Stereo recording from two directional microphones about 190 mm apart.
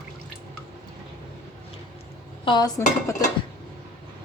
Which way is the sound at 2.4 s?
20° left (ahead or behind).